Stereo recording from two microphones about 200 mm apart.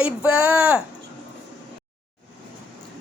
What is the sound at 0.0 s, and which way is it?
Speech, 5° right (ahead or behind).